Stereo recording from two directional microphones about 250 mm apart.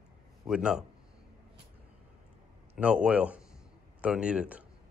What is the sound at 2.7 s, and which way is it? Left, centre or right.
A man's voice, centre.